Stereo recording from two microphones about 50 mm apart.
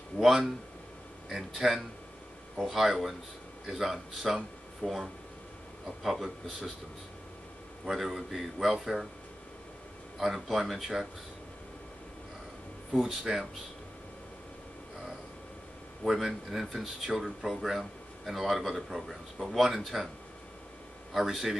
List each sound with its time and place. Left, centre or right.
0.2 s a man's voice: centre
8.0 s speech: centre
10.1 s speech: centre
12.9 s a man's voice: centre
16.0 s speech: centre
21.1 s a man's voice: centre